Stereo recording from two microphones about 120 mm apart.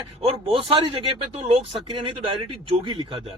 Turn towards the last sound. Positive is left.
turn(degrees=-45)  # may be behind; listen again after turning